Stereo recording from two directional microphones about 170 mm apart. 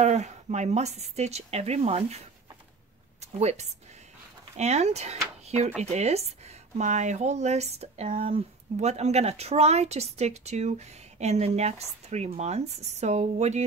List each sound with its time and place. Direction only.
0.0 s speech: 40° right (ahead or behind)
3.2 s speech: 40° right (ahead or behind)